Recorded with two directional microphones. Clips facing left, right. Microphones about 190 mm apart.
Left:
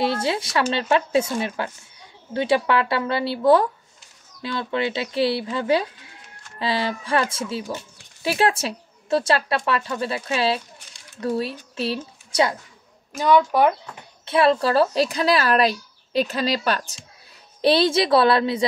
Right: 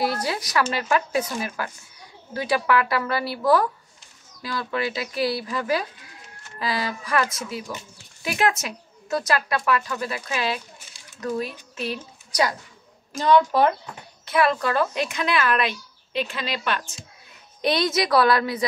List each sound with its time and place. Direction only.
0.0 s a woman's voice: 25° left (ahead or behind)
13.2 s speech: 15° left (ahead or behind)
14.2 s speech: 30° left (ahead or behind)